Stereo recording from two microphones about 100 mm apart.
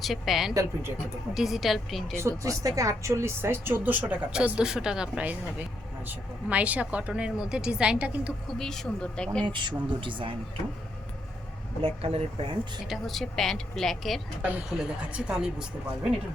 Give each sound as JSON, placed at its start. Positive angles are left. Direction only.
{"t": 0.0, "sound": "a woman's voice", "side_deg": 0}
{"t": 0.5, "sound": "a woman's voice", "side_deg": -25}
{"t": 1.3, "sound": "a woman's voice", "side_deg": -5}
{"t": 2.6, "sound": "a woman's voice", "side_deg": -35}
{"t": 4.3, "sound": "speech", "side_deg": -10}
{"t": 8.4, "sound": "speech", "side_deg": 5}
{"t": 9.5, "sound": "speech", "side_deg": -50}
{"t": 11.8, "sound": "speech", "side_deg": -75}
{"t": 12.9, "sound": "a woman's voice", "side_deg": 0}
{"t": 14.4, "sound": "speech", "side_deg": -10}